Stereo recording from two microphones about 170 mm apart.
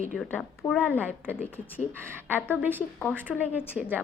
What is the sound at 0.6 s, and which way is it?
Speech, 25° left (ahead or behind).